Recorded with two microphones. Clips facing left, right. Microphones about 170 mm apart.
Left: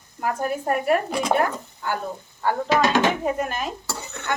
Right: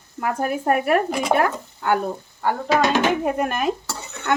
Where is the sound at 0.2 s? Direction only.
60° right (ahead or behind).